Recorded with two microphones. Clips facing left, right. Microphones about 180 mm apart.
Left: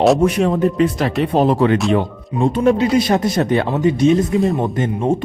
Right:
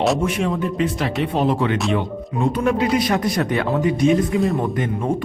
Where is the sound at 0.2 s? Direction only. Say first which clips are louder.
Left 6 dB; 40° left (ahead or behind).